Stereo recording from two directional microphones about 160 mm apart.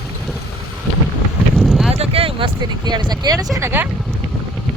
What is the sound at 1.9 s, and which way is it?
Speech, 40° right (ahead or behind).